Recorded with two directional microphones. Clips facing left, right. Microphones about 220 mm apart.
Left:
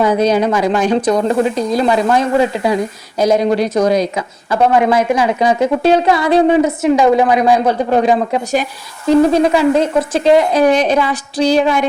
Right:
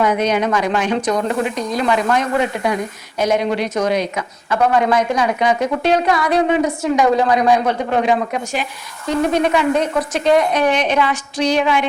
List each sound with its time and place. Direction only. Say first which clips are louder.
0.0 s a woman's voice: left 4 dB; 30° left (ahead or behind)